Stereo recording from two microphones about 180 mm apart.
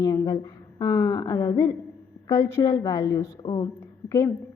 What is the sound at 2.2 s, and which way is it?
A woman's voice, 20° left (ahead or behind).